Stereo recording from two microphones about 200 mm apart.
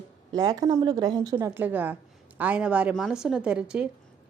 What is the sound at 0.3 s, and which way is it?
A woman's voice, 20° right (ahead or behind).